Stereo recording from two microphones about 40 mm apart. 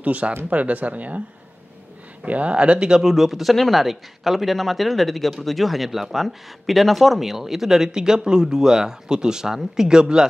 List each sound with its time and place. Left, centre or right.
0.0 s speech: right
2.2 s speech: right
3.0 s speech: centre